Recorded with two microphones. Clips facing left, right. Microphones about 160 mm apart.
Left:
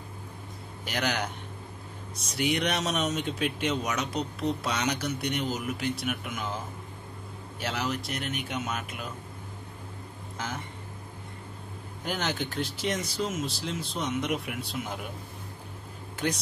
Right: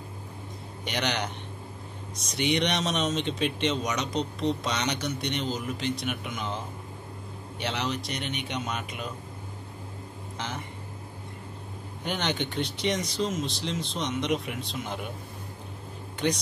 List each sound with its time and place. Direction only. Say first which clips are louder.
0.8 s speech: even; 5° left (ahead or behind)
2.3 s speech: right 1 dB; 5° left (ahead or behind)
7.6 s speech: right 1 dB; 5° left (ahead or behind)
10.3 s a sound: even; 5° left (ahead or behind)
12.0 s speech: right 1 dB; 5° left (ahead or behind)
16.2 s speech: right 3 dB; 5° left (ahead or behind)